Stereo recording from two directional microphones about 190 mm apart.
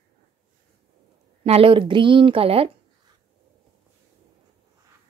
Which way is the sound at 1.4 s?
30° right (ahead or behind).